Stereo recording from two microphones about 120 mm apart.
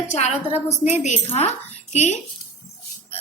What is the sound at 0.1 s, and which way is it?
A woman's voice, 70° left (ahead or behind).